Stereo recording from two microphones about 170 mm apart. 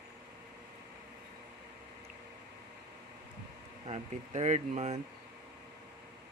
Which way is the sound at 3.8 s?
40° right (ahead or behind).